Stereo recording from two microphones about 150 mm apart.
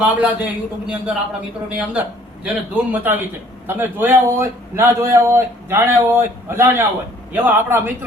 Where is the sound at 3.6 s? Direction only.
15° right (ahead or behind).